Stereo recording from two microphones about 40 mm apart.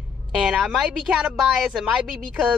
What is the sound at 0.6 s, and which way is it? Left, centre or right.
Speech, right.